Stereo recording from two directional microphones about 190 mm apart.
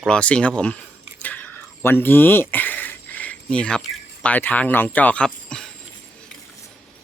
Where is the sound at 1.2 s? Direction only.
10° left (ahead or behind).